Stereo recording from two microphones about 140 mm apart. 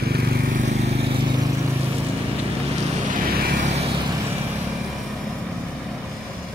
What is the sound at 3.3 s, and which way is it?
Vehicle, 90° right.